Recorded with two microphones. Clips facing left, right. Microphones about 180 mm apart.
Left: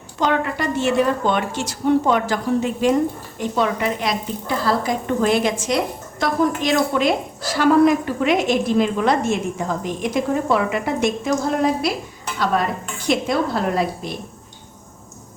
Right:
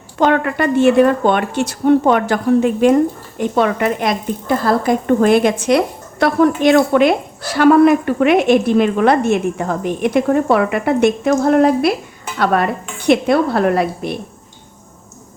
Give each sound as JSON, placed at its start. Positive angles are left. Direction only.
{"t": 0.2, "sound": "a woman's voice", "side_deg": -60}